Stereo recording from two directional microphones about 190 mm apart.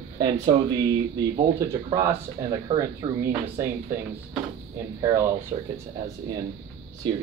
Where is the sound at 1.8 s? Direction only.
20° right (ahead or behind).